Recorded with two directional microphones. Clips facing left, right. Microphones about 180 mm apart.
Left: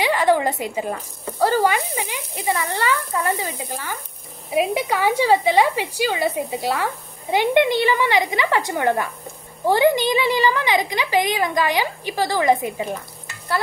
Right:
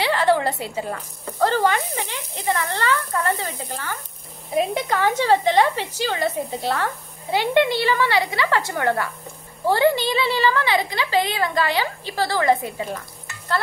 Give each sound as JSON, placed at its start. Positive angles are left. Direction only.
{"t": 0.0, "sound": "a woman's voice", "side_deg": 15}